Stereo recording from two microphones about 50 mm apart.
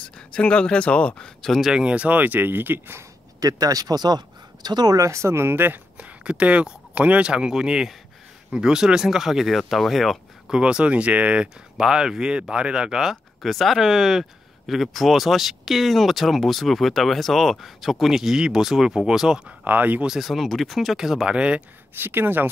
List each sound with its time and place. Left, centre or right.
0.3 s speech: left
1.7 s speech: centre; by 4.0 s right
5.0 s speech: right
5.9 s speech: right; by 10.1 s centre
10.5 s speech: centre
11.4 s speech: centre
19.6 s speech: right
20.1 s speech: centre
21.4 s speech: right
21.9 s speech: right